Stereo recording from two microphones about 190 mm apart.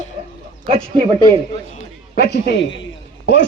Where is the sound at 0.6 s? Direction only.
30° right (ahead or behind).